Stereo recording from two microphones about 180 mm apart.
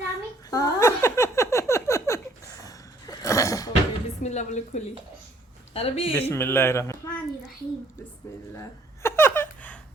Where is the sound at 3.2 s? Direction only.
15° left (ahead or behind).